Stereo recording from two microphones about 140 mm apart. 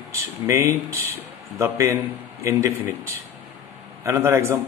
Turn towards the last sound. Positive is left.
turn(degrees=-20)  # may be behind; listen again after turning